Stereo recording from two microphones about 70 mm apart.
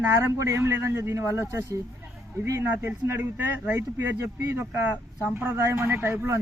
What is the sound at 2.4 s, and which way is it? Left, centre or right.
Speech, right.